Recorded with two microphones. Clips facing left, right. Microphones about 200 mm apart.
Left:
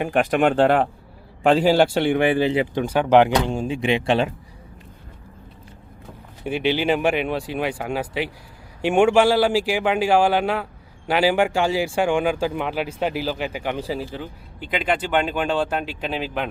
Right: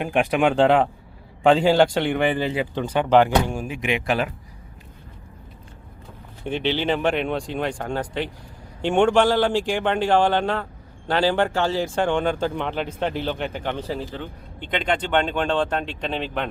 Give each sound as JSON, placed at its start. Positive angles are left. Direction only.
{"t": 0.5, "sound": "speech", "side_deg": 5}
{"t": 2.5, "sound": "speech", "side_deg": 20}
{"t": 2.8, "sound": "speech", "side_deg": 10}
{"t": 6.4, "sound": "speech", "side_deg": 10}